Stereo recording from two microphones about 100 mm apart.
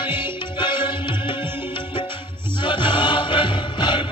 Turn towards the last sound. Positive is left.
turn(degrees=55)  # may be behind; listen again after turning